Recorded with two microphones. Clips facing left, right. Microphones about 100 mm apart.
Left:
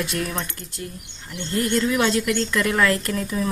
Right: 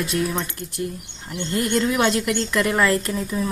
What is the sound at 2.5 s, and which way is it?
Speech, 15° right (ahead or behind).